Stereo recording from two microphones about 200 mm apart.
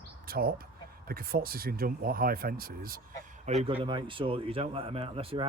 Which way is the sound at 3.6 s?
25° right (ahead or behind).